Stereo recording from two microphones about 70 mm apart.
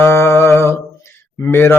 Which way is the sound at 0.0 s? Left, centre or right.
Left.